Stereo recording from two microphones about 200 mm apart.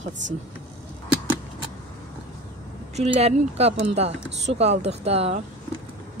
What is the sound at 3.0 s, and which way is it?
Speech, 30° right (ahead or behind).